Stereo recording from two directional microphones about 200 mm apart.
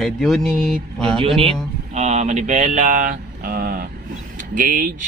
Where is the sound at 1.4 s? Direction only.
30° right (ahead or behind); by 3.9 s 45° right (ahead or behind).